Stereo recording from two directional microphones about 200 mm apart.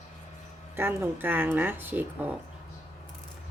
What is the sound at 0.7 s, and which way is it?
Speech, 10° right (ahead or behind).